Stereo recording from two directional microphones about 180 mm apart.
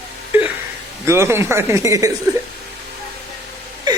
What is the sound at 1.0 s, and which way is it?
Speech, 15° right (ahead or behind).